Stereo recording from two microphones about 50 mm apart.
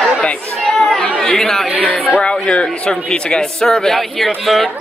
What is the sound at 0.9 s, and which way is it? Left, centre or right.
Speech, centre.